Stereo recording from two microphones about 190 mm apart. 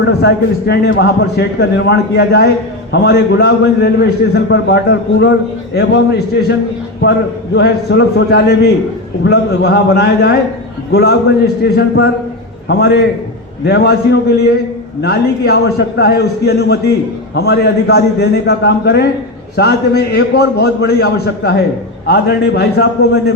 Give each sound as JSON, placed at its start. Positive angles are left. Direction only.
{"t": 0.0, "sound": "a man's voice", "side_deg": 65}